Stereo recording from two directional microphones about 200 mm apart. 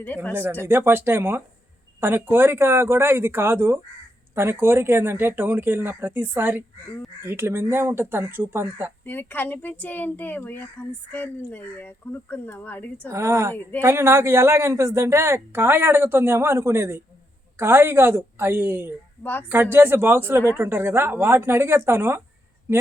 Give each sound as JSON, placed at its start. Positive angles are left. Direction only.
{"t": 0.0, "sound": "speech", "side_deg": 10}
{"t": 0.6, "sound": "speech", "side_deg": -10}
{"t": 9.0, "sound": "speech", "side_deg": 10}
{"t": 13.1, "sound": "speech", "side_deg": -15}
{"t": 19.2, "sound": "speech", "side_deg": 10}
{"t": 19.5, "sound": "speech", "side_deg": -10}